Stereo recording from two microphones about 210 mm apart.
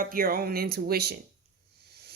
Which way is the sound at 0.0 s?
45° right (ahead or behind).